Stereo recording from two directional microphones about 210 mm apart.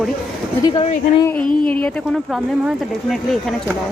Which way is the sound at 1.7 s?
5° left (ahead or behind).